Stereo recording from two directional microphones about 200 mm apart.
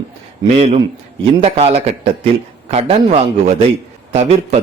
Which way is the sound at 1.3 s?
30° right (ahead or behind).